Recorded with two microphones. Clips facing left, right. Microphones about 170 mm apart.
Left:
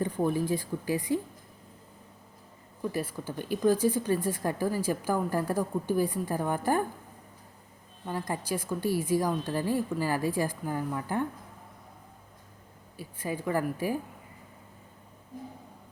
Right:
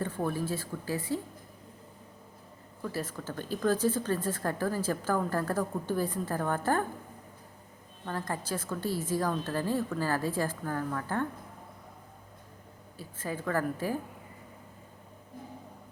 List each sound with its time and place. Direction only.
0.0 s speech: 15° left (ahead or behind)
2.8 s speech: 15° left (ahead or behind)
8.0 s speech: 15° left (ahead or behind)
13.0 s speech: 15° left (ahead or behind)